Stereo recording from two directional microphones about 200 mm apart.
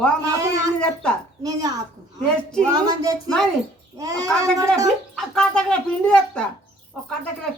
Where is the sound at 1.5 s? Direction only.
20° right (ahead or behind).